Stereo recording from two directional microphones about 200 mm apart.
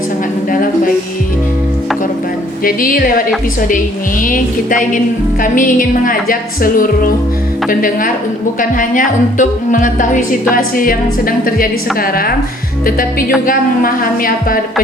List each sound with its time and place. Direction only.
2.6 s a woman's voice: 45° left (ahead or behind)